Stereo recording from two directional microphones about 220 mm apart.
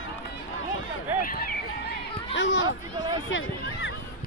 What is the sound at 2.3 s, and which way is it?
Speech, 60° left (ahead or behind).